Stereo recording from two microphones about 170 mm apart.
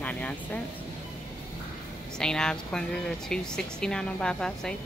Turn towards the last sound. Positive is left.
turn(degrees=5)  # may be behind; listen again after turning